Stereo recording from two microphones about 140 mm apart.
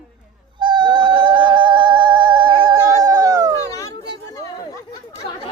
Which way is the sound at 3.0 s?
25° right (ahead or behind).